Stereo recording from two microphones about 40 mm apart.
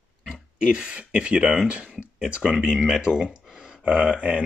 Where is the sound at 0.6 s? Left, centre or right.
Right.